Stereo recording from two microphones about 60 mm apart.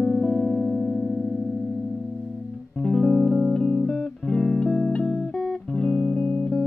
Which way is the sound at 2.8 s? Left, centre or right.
Centre.